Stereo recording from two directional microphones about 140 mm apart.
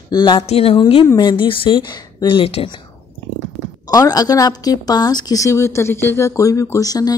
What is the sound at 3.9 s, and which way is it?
A woman's voice, 25° left (ahead or behind).